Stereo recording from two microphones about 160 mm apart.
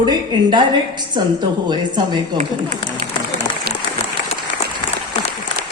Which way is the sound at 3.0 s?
45° right (ahead or behind).